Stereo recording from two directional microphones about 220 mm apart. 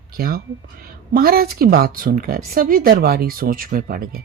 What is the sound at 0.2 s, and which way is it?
Speech, 45° right (ahead or behind).